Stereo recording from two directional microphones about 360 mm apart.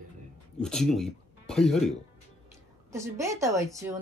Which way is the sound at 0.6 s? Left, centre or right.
Centre.